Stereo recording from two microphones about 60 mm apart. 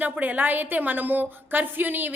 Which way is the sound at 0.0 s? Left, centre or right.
Right.